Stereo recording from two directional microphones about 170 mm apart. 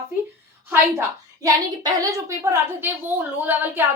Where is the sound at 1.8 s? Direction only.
20° right (ahead or behind).